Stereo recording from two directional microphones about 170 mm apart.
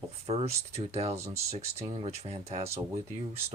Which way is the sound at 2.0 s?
40° right (ahead or behind).